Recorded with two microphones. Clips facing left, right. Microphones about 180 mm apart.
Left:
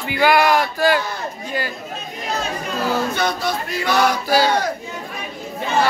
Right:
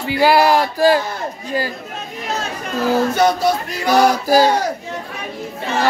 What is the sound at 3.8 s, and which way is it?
Speech, 35° right (ahead or behind).